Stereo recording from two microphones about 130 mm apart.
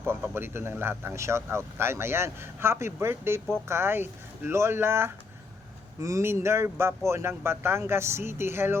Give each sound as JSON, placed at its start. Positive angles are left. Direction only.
{"t": 0.0, "sound": "speech", "side_deg": -15}